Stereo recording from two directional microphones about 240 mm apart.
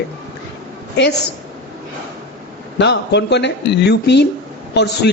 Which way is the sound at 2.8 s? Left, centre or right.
Left.